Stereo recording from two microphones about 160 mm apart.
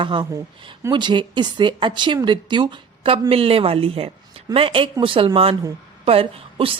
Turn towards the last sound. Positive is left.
turn(degrees=-35)  # may be behind; listen again after turning